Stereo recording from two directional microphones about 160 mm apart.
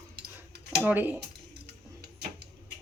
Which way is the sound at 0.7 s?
10° right (ahead or behind).